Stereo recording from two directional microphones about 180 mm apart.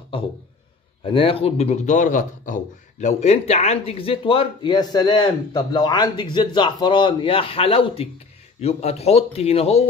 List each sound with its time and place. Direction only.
1.0 s a man's voice: 30° left (ahead or behind)